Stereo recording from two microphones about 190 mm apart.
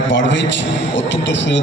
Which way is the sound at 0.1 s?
70° left (ahead or behind).